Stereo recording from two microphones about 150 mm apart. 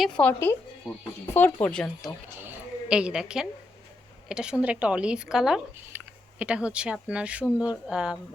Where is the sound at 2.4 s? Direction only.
10° right (ahead or behind).